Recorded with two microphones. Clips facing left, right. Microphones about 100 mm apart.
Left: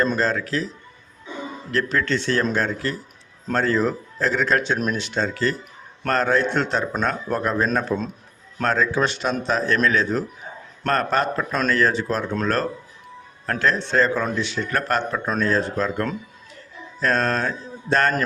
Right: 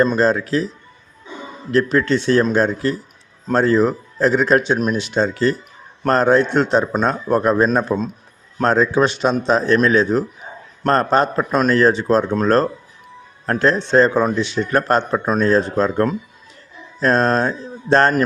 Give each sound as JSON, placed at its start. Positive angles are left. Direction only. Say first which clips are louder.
{"t": 0.2, "sound": "a man's voice", "louder": "right 6 dB", "side_deg": -20}
{"t": 1.7, "sound": "a man's voice", "louder": "right 6 dB", "side_deg": -20}